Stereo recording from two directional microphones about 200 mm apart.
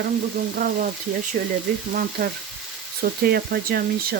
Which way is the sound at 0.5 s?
45° right (ahead or behind).